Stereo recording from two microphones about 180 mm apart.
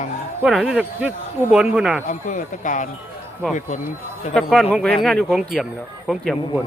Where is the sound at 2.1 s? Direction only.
45° left (ahead or behind).